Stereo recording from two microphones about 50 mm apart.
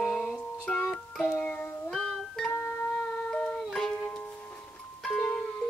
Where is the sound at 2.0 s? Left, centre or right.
Centre.